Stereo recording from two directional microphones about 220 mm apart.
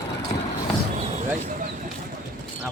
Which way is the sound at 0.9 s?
30° right (ahead or behind).